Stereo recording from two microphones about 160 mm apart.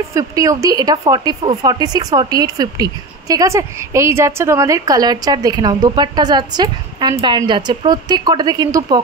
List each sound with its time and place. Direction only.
0.1 s a woman's voice: 20° right (ahead or behind)